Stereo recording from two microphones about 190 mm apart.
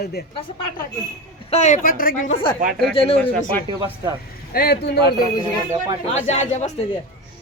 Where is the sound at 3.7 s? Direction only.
25° right (ahead or behind).